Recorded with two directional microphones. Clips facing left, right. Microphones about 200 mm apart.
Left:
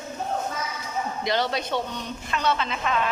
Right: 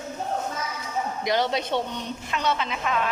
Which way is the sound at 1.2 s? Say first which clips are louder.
Right 2 dB; 15° right (ahead or behind).